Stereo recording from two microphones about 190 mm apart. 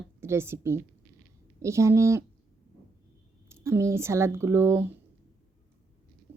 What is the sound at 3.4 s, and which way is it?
A woman's voice, 15° right (ahead or behind).